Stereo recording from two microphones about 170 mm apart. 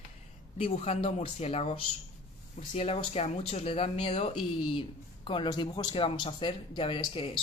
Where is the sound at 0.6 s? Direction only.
35° left (ahead or behind).